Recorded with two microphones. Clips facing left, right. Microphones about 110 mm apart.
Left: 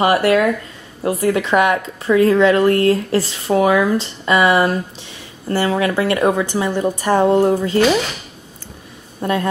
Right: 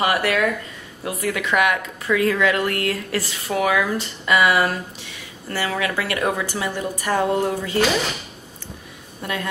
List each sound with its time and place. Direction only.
0.0 s speech: 30° left (ahead or behind)
9.2 s a woman's voice: 35° left (ahead or behind)